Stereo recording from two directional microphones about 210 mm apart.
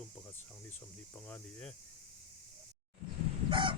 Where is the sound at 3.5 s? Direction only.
25° right (ahead or behind).